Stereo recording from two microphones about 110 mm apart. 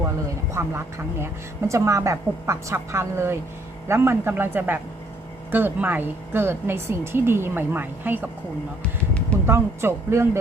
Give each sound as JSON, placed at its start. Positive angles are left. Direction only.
{"t": 0.5, "sound": "a woman's voice", "side_deg": -25}
{"t": 8.8, "sound": "music", "side_deg": 10}
{"t": 9.5, "sound": "a woman's voice", "side_deg": -25}